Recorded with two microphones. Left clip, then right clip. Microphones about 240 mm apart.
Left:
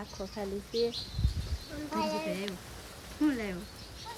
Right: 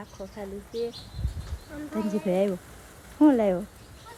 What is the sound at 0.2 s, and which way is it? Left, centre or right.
Speech, centre.